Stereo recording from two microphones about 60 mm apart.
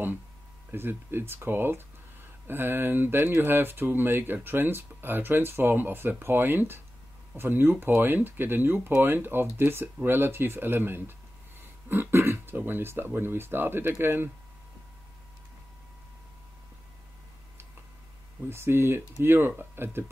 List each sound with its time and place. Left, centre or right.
0.7 s speech: right
18.5 s speech: right